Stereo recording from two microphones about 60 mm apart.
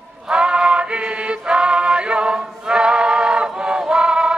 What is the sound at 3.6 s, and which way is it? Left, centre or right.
Choir, centre.